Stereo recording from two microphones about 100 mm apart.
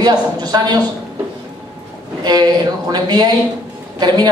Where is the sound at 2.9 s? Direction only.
45° right (ahead or behind).